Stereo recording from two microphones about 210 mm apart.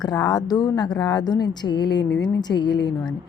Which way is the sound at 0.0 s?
20° left (ahead or behind).